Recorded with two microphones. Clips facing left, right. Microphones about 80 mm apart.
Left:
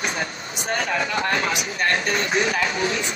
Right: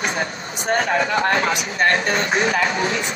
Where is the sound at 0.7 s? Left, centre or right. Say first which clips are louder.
Right 5 dB; right.